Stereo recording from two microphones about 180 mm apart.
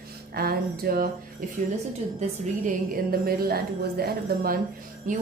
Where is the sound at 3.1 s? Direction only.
55° right (ahead or behind).